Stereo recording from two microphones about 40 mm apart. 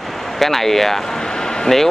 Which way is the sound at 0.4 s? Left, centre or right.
Centre.